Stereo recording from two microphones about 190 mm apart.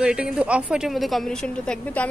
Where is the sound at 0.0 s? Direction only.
5° right (ahead or behind).